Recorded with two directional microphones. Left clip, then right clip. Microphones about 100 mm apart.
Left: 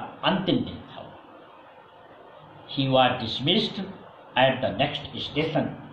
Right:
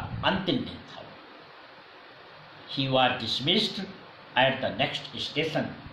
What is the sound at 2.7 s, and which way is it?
A man's voice, 25° right (ahead or behind).